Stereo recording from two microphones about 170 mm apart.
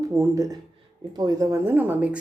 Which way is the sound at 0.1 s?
20° right (ahead or behind).